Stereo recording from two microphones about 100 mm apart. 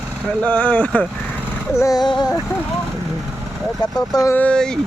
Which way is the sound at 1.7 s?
30° left (ahead or behind).